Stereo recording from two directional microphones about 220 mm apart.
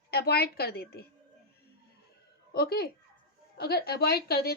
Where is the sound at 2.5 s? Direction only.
45° left (ahead or behind).